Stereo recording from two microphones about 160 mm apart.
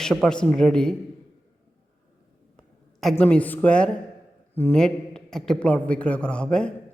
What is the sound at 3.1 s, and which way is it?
A man's voice, 10° left (ahead or behind).